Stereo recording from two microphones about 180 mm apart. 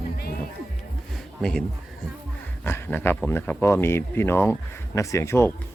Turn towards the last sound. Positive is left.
turn(degrees=15)  # may be behind; listen again after turning